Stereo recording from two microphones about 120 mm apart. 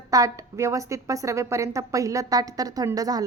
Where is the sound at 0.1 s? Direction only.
30° right (ahead or behind).